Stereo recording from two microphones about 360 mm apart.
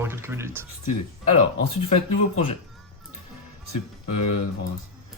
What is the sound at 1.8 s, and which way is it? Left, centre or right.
Speech, centre.